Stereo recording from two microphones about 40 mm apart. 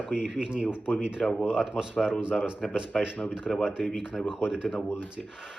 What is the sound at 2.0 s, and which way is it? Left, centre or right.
Speech, right.